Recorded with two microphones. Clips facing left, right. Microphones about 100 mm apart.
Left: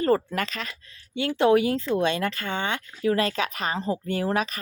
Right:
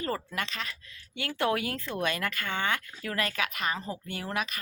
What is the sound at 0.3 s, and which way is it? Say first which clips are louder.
Speech: left 5 dB; 45° left (ahead or behind).